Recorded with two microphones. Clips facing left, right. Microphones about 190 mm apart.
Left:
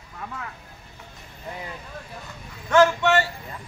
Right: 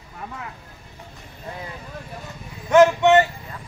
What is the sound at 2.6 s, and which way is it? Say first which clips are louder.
Speech: right 4 dB; 20° right (ahead or behind).